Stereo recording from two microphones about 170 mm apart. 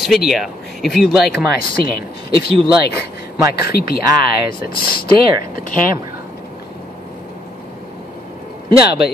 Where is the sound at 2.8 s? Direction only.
70° left (ahead or behind).